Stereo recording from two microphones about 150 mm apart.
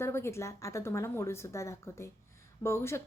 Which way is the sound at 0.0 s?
15° left (ahead or behind).